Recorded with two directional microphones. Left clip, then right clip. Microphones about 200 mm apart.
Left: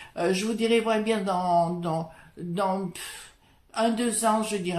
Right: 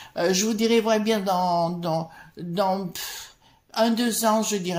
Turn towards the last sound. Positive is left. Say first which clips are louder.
# right 2 dB
turn(degrees=-35)  # may be behind; listen again after turning